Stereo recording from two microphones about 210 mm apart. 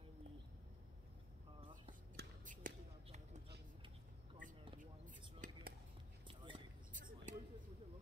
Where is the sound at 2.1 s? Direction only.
40° right (ahead or behind).